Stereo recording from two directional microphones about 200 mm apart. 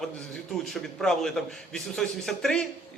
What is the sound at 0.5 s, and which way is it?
A man's voice, centre (ahead or behind).